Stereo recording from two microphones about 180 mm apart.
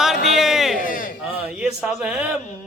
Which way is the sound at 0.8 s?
50° left (ahead or behind).